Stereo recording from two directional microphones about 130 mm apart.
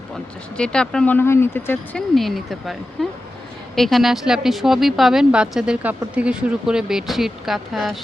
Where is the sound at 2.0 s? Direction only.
Centre (ahead or behind).